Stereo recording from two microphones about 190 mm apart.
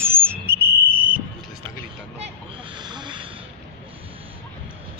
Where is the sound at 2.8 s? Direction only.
25° right (ahead or behind).